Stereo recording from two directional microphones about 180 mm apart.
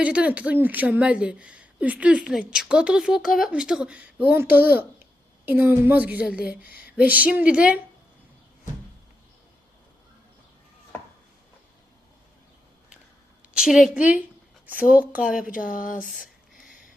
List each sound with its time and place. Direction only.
0.0 s a woman's voice: 5° right (ahead or behind)
6.6 s speech: 55° left (ahead or behind)
6.8 s a woman's voice: 10° right (ahead or behind)
13.5 s a woman's voice: centre (ahead or behind)
15.6 s speech: 50° left (ahead or behind)
16.0 s a sound: 5° right (ahead or behind)